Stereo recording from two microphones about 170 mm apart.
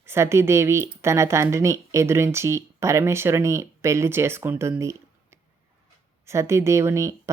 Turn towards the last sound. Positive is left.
turn(degrees=-15)  # may be behind; listen again after turning